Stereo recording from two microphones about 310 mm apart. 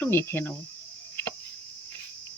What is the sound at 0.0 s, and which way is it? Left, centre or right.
Speech, centre.